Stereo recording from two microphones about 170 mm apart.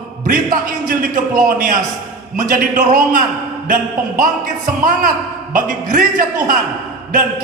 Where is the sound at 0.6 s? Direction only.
55° right (ahead or behind).